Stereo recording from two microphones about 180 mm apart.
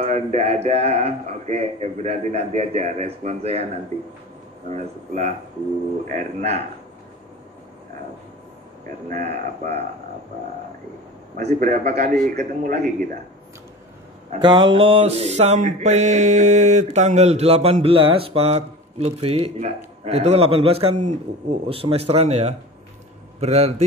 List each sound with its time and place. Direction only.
0.0 s mantra: 40° right (ahead or behind)
9.1 s mantra: 40° right (ahead or behind)
11.3 s a man's voice: 45° right (ahead or behind)
14.4 s mantra: 25° right (ahead or behind)